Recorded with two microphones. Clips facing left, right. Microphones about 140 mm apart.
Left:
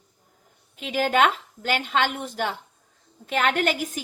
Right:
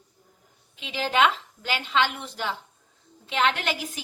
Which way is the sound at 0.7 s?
50° left (ahead or behind).